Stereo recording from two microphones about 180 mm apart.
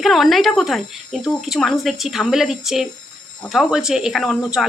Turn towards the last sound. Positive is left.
turn(degrees=0)  # may be behind; listen again after turning